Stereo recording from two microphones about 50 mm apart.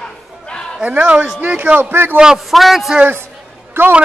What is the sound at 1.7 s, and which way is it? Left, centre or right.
Speech, right.